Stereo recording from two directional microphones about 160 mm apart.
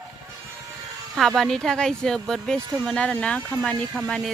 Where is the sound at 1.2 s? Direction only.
Centre (ahead or behind).